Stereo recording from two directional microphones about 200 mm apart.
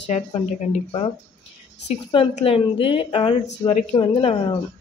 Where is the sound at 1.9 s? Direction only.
30° left (ahead or behind).